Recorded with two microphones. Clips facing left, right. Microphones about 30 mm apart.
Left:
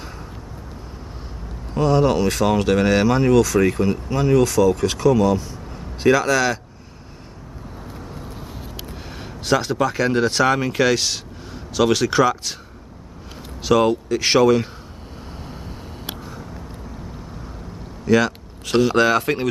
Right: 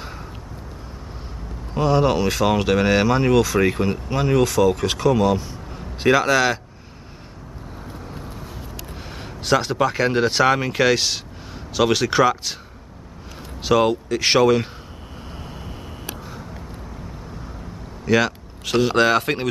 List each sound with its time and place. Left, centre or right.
1.7 s speech: centre
9.2 s speech: centre
13.6 s speech: centre
18.0 s speech: centre